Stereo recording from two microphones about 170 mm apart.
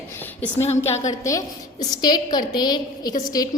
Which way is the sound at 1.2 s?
20° left (ahead or behind).